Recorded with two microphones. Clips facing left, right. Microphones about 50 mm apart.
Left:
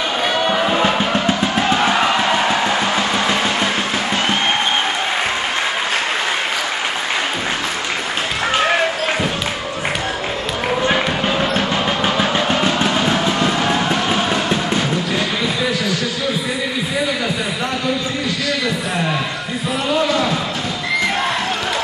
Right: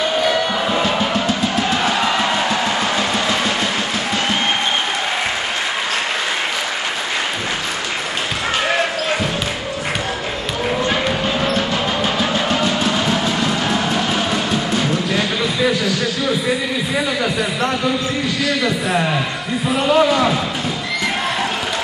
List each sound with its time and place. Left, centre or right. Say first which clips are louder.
0.8 s music: left 1 dB; left
11.5 s train: left 1 dB; left
12.7 s music: left 1 dB; left
19.9 s basketball bounce: right 3 dB; centre